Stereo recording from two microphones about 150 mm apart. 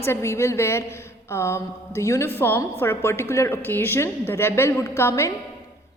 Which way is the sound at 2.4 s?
15° left (ahead or behind).